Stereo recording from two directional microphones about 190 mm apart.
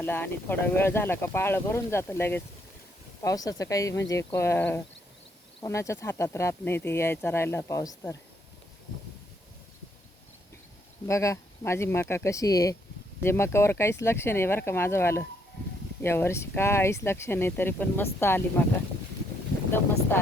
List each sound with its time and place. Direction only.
0.0 s speech: 10° left (ahead or behind)
11.0 s speech: 15° left (ahead or behind)